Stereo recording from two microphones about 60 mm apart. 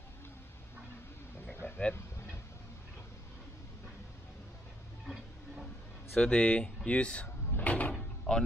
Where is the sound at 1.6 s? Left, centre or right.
Left.